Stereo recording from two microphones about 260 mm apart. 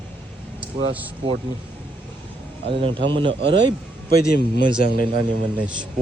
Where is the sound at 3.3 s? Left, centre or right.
Right.